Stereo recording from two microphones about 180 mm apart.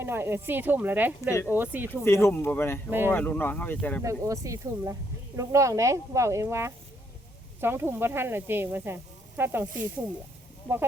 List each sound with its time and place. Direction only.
0.0 s speech: 15° right (ahead or behind)
2.0 s speech: 15° left (ahead or behind)
4.0 s speech: 15° right (ahead or behind)
10.7 s speech: 10° left (ahead or behind)